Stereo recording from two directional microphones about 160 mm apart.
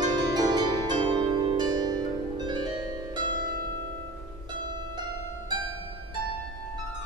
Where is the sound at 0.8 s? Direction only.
30° right (ahead or behind).